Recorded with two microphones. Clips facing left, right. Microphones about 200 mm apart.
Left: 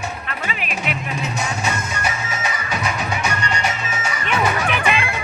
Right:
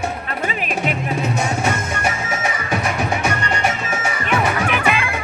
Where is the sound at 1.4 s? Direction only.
55° right (ahead or behind).